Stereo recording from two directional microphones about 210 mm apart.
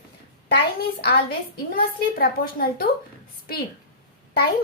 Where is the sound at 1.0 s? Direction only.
50° left (ahead or behind).